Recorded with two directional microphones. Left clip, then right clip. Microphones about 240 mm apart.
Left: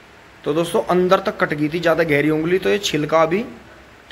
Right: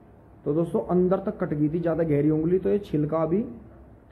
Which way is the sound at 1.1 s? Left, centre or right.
Centre.